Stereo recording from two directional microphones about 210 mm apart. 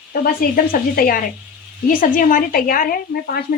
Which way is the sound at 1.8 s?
40° left (ahead or behind).